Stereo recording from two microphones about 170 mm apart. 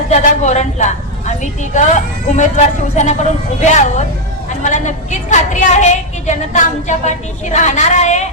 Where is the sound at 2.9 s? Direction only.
45° left (ahead or behind).